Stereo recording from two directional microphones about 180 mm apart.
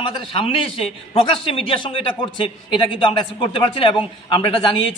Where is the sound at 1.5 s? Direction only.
30° left (ahead or behind).